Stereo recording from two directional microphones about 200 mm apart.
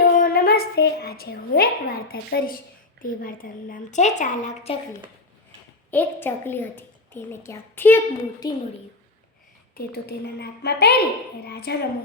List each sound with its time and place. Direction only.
0.2 s a woman's voice: 50° left (ahead or behind)
5.9 s a woman's voice: 10° left (ahead or behind)
9.7 s a woman's voice: 55° left (ahead or behind)